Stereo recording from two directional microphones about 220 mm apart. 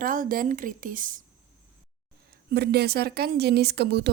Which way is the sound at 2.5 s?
45° right (ahead or behind).